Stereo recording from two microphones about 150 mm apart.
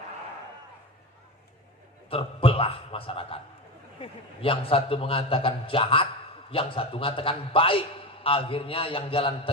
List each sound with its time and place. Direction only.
2.0 s a man's voice: 40° left (ahead or behind)